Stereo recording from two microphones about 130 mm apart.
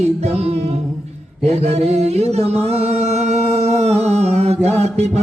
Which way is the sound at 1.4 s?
55° right (ahead or behind).